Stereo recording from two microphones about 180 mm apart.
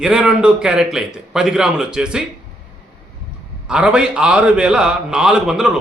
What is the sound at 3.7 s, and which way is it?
A man's voice, 5° right (ahead or behind).